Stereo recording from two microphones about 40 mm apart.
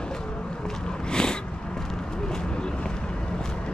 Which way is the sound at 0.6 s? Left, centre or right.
Left.